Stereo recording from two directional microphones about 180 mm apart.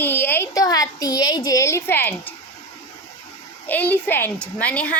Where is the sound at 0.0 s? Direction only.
10° left (ahead or behind).